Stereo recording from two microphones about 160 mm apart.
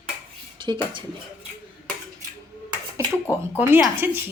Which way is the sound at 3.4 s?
15° right (ahead or behind).